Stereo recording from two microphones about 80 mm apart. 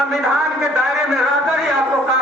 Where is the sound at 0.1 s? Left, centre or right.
Centre.